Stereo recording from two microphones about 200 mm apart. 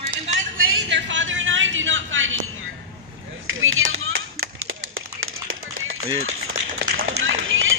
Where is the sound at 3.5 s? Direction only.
85° right.